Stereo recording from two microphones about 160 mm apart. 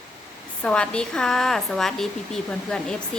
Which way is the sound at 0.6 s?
5° left (ahead or behind).